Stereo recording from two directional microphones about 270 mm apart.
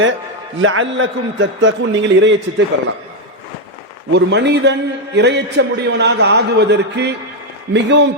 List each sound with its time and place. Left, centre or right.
0.6 s a man's voice: right
4.1 s a man's voice: right